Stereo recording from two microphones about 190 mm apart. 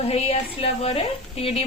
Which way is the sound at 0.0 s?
30° left (ahead or behind).